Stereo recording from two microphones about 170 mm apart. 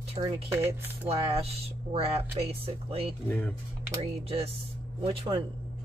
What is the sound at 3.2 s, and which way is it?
Speech, 10° left (ahead or behind).